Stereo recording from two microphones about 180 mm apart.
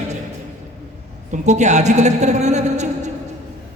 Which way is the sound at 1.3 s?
40° right (ahead or behind).